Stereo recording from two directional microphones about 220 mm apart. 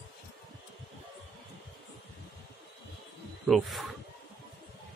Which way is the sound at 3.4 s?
Centre (ahead or behind).